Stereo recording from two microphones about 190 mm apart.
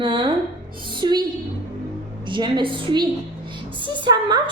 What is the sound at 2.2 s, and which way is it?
A woman's voice, 25° right (ahead or behind).